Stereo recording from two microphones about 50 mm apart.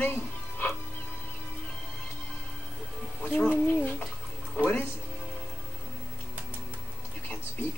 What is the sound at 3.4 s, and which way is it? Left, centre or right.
Speech, left.